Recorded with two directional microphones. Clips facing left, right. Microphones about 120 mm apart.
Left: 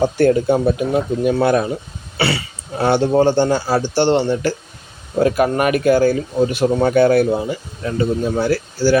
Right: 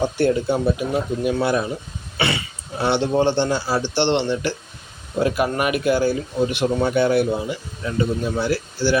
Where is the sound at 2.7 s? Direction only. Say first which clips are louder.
Left 5 dB; 45° left (ahead or behind).